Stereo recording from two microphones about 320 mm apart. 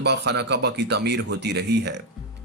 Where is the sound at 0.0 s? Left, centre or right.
Right.